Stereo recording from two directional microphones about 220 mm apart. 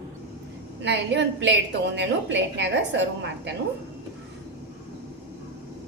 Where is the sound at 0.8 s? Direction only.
50° right (ahead or behind).